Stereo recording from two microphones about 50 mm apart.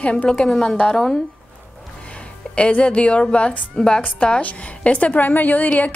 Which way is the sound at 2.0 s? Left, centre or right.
Left.